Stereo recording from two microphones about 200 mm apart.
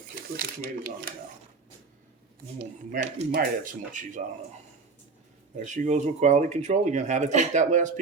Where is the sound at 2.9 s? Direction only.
40° right (ahead or behind).